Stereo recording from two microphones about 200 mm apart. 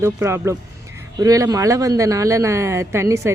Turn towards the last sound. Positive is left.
turn(degrees=-15)  # may be behind; listen again after turning